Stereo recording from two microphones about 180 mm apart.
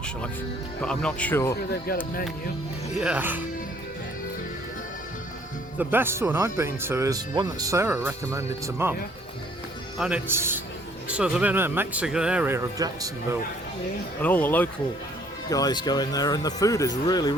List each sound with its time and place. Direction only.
0.8 s speech: 5° left (ahead or behind)
3.0 s speech: 10° right (ahead or behind)
5.8 s speech: 10° right (ahead or behind)
10.0 s speech: 10° right (ahead or behind)
14.2 s speech: 10° left (ahead or behind)
15.4 s speech: 20° left (ahead or behind)